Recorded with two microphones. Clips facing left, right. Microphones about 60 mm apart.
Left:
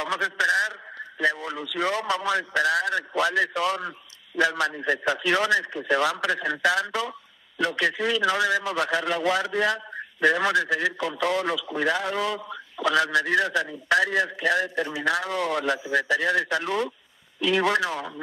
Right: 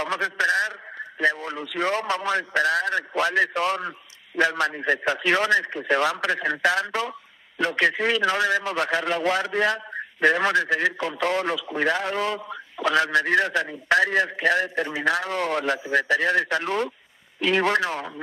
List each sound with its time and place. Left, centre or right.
0.0 s a man's voice: right